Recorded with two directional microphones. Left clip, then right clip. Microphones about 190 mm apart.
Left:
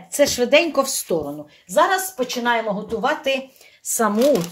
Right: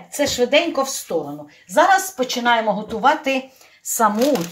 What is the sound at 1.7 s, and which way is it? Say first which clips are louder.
Speech: right 3 dB; 40° left (ahead or behind).